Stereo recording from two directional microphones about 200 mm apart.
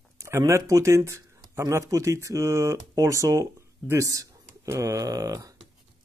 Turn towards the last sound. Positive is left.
turn(degrees=-15)  # may be behind; listen again after turning